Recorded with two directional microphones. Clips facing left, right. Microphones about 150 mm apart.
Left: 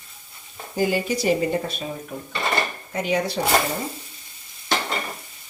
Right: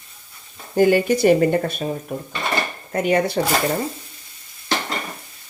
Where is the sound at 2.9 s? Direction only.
55° right (ahead or behind).